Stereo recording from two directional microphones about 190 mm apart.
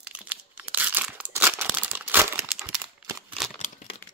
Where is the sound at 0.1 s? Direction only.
10° right (ahead or behind).